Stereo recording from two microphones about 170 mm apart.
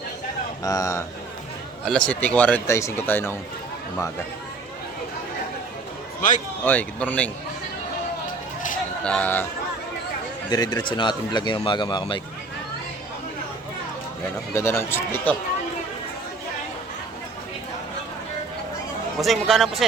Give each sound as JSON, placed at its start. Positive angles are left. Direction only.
{"t": 0.6, "sound": "speech", "side_deg": 20}
{"t": 1.8, "sound": "a man's voice", "side_deg": 5}
{"t": 6.7, "sound": "a man's voice", "side_deg": 10}
{"t": 9.0, "sound": "a man's voice", "side_deg": 10}
{"t": 10.5, "sound": "speech", "side_deg": 25}
{"t": 14.5, "sound": "a man's voice", "side_deg": 15}
{"t": 19.2, "sound": "speech", "side_deg": 0}